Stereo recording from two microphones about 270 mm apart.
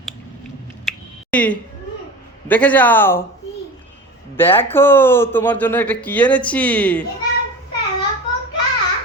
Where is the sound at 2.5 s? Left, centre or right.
Centre.